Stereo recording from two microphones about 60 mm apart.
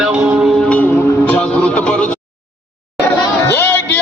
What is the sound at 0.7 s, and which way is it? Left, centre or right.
Music, centre.